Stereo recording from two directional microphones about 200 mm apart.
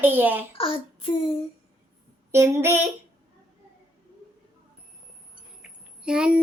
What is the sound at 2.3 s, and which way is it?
Speech, 15° right (ahead or behind).